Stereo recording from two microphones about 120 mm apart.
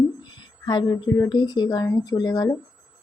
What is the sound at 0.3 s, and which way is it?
A woman's voice, 40° left (ahead or behind).